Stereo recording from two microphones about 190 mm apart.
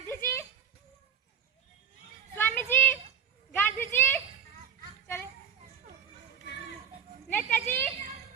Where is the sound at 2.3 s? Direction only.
10° left (ahead or behind).